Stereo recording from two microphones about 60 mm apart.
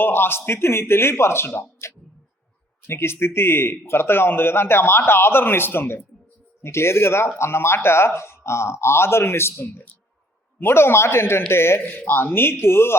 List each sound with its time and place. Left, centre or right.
0.0 s speech: left
2.8 s speech: left